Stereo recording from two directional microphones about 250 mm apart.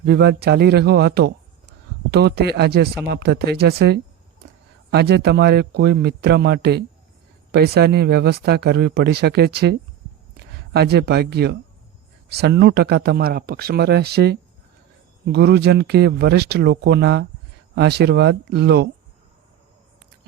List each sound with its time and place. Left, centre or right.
0.0 s speech: right